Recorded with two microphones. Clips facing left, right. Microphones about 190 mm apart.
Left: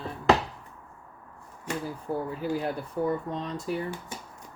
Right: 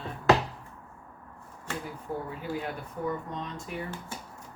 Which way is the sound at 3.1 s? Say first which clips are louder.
Left 4 dB; 35° left (ahead or behind).